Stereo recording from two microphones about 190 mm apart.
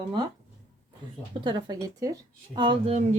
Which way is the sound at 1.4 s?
20° right (ahead or behind).